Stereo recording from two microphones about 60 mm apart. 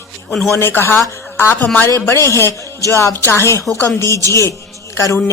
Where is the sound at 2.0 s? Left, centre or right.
Left.